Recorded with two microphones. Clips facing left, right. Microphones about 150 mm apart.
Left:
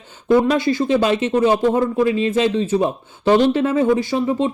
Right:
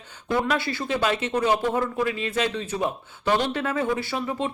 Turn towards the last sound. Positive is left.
turn(degrees=25)  # may be behind; listen again after turning